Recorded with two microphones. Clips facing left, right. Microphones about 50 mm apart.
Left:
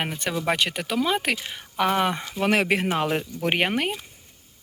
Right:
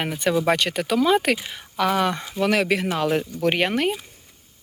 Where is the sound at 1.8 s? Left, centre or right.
Centre.